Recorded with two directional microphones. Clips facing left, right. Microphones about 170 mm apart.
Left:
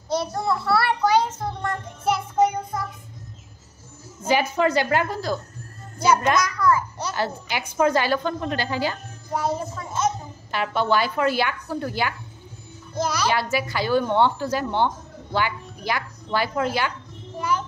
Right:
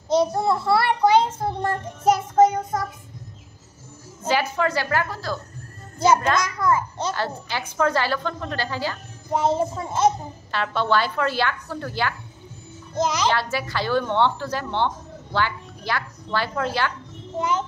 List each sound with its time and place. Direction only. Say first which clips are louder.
0.1 s a child's voice: right 4 dB; 20° right (ahead or behind); by 2.8 s 45° right (ahead or behind)
4.3 s a woman's voice: left 2 dB; 20° left (ahead or behind)
5.9 s a child's voice: right 1 dB; 25° right (ahead or behind)
7.2 s a woman's voice: left 1 dB; 15° left (ahead or behind)
9.3 s a child's voice: right 4 dB; 25° right (ahead or behind)
10.5 s a woman's voice: even; 15° left (ahead or behind)
12.9 s a child's voice: right 2 dB; 20° right (ahead or behind)
13.3 s a woman's voice: left 1 dB; 10° left (ahead or behind)
17.4 s a child's voice: right 2 dB; 20° right (ahead or behind)